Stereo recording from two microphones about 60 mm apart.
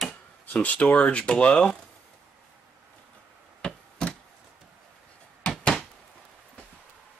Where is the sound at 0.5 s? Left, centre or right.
Left.